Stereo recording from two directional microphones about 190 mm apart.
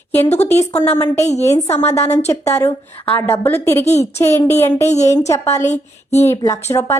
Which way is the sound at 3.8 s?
35° left (ahead or behind).